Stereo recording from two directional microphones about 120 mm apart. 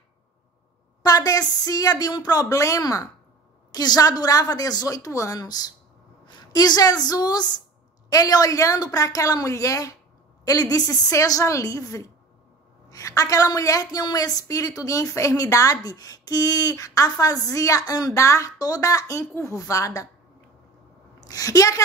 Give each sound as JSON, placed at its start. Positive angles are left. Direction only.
{"t": 1.0, "sound": "a woman's voice", "side_deg": 30}
{"t": 21.2, "sound": "a woman's voice", "side_deg": 30}